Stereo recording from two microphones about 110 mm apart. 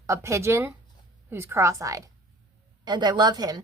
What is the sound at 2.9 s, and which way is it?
Speech, 40° right (ahead or behind).